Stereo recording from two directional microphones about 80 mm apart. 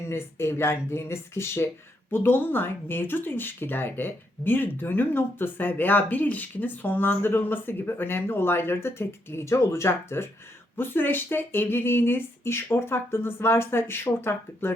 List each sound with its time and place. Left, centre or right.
0.1 s speech: left